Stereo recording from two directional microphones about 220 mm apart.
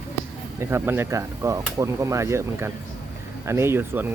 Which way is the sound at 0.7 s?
10° right (ahead or behind).